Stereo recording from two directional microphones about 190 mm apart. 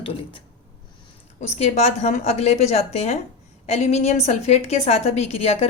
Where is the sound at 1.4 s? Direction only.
35° left (ahead or behind).